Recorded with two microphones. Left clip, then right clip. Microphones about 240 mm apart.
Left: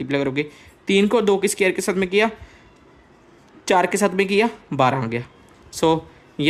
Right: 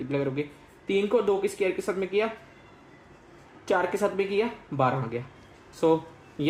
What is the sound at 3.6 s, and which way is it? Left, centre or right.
A man's voice, left.